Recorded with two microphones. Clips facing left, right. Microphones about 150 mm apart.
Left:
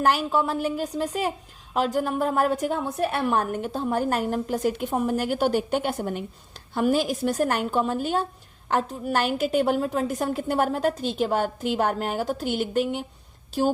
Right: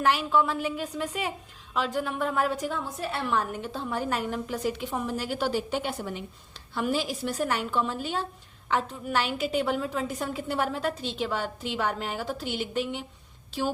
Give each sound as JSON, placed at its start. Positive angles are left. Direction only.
{"t": 0.0, "sound": "a woman's voice", "side_deg": 40}